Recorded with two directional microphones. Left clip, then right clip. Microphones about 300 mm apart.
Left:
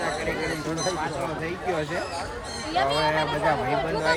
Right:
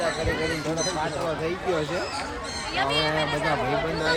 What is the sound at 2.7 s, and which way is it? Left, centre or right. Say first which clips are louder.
Speech: left 2 dB; centre.